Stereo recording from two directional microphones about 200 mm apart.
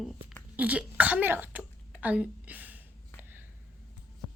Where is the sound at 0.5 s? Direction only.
5° right (ahead or behind).